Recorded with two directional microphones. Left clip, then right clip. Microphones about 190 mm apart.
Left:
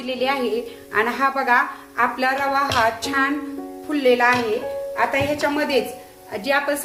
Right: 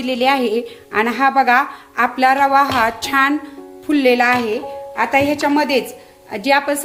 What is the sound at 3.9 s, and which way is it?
A woman's voice, 55° right (ahead or behind).